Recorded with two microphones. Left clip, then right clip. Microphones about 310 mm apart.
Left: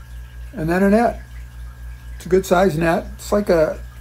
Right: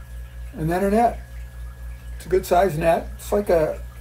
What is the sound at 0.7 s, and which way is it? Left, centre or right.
Speech, left.